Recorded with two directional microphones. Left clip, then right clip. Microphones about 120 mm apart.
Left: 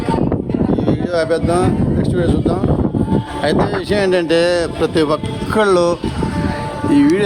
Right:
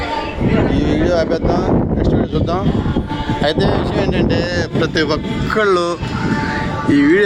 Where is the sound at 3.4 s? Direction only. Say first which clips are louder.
Right 1 dB; 40° left (ahead or behind).